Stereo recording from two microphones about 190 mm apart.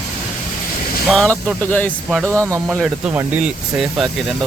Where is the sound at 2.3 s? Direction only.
15° right (ahead or behind).